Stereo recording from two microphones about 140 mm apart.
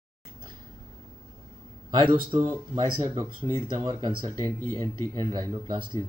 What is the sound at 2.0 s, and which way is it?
Speech, 35° right (ahead or behind).